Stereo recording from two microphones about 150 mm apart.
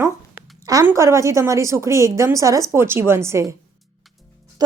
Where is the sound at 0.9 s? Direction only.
20° right (ahead or behind).